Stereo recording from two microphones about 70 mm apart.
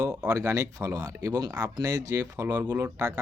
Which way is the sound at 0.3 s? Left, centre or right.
Right.